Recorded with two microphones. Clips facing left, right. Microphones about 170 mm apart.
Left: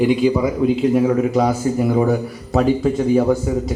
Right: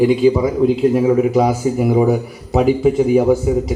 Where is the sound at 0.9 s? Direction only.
10° right (ahead or behind).